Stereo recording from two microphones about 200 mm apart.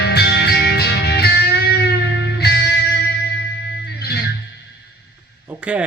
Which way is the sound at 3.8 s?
55° left (ahead or behind).